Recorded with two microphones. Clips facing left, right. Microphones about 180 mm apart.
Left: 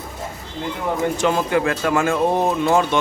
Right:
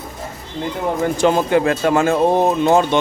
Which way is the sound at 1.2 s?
30° right (ahead or behind).